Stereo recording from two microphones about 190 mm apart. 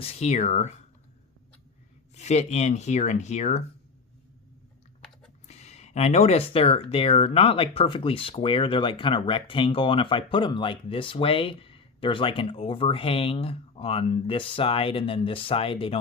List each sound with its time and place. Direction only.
0.0 s speech: 35° left (ahead or behind)
2.1 s speech: 35° left (ahead or behind)
5.5 s speech: 35° left (ahead or behind)